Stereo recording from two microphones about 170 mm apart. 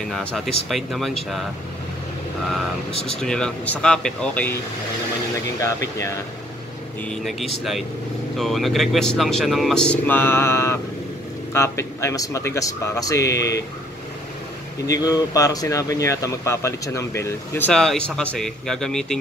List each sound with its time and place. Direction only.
0.1 s speech: 5° left (ahead or behind)
3.2 s speech: 5° left (ahead or behind)
7.1 s a man's voice: centre (ahead or behind); by 13.5 s 20° left (ahead or behind)
14.9 s speech: 20° left (ahead or behind); by 19.1 s 5° left (ahead or behind)